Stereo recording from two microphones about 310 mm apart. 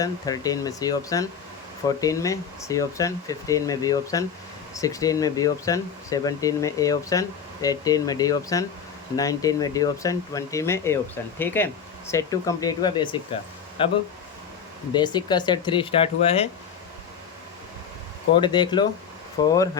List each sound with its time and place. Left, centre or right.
0.0 s speech: centre
18.3 s speech: centre